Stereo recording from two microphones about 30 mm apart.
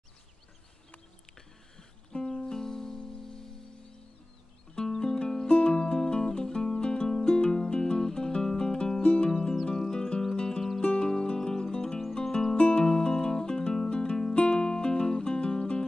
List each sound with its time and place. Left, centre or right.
2.1 s music: left
4.7 s music: left
5.6 s music: left
6.8 s music: left
9.0 s music: left
12.5 s music: left
12.8 s music: left